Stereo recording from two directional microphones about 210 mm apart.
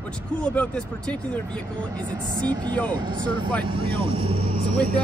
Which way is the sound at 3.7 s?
25° right (ahead or behind).